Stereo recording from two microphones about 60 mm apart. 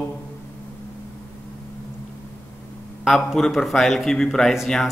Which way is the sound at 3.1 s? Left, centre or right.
Centre.